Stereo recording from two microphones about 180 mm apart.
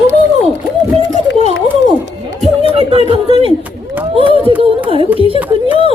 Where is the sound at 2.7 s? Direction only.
35° right (ahead or behind).